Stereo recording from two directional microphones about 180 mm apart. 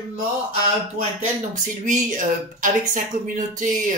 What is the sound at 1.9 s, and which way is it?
Speech, 45° right (ahead or behind).